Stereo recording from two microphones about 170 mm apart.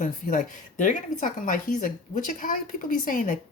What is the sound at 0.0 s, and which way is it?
A woman's voice, 50° left (ahead or behind).